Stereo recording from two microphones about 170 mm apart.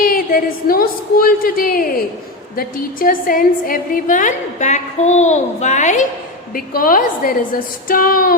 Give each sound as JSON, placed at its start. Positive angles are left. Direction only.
{"t": 0.0, "sound": "a woman's voice", "side_deg": 55}